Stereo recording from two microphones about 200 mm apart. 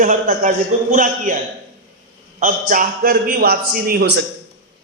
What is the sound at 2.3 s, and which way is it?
A man's voice, 40° right (ahead or behind).